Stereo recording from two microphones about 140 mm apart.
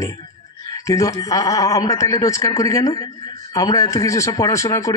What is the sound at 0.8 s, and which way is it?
Speech, 20° left (ahead or behind).